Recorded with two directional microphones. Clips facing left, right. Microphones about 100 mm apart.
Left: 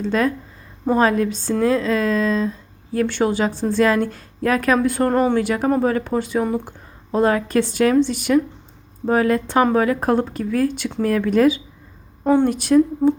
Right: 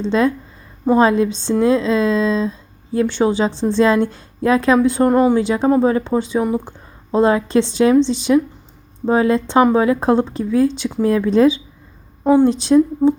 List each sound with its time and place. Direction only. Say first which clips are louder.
0.0 s a woman's voice: right 3 dB; 25° right (ahead or behind)
5.4 s a woman's voice: right 4 dB; 20° right (ahead or behind)
12.2 s a woman's voice: right 3 dB; 10° right (ahead or behind)
12.5 s a woman's voice: right 2 dB; 20° right (ahead or behind)